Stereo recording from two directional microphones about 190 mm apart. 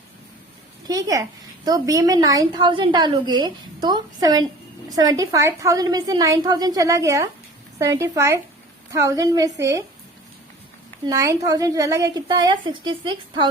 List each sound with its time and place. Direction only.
0.9 s a woman's voice: 20° right (ahead or behind)
11.0 s a woman's voice: 15° right (ahead or behind)